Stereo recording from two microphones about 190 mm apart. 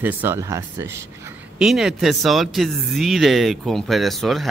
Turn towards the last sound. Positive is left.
turn(degrees=0)  # may be behind; listen again after turning